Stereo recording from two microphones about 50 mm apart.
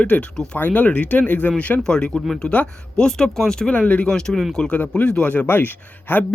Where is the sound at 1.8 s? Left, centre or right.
Centre.